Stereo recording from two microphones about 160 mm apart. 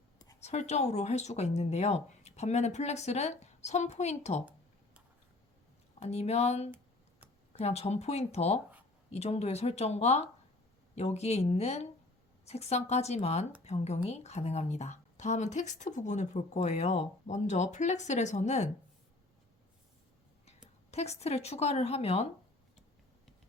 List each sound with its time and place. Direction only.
0.4 s speech: 45° left (ahead or behind)
6.0 s a woman's voice: 40° left (ahead or behind)
20.9 s a woman's voice: 40° left (ahead or behind)